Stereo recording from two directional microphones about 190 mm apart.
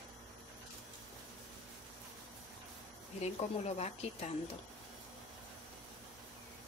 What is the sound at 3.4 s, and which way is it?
Speech, 35° left (ahead or behind).